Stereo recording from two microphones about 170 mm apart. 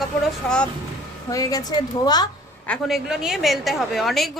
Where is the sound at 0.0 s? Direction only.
5° left (ahead or behind).